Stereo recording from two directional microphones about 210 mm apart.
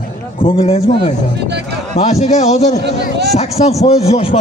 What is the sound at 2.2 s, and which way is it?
A man's voice, 30° left (ahead or behind).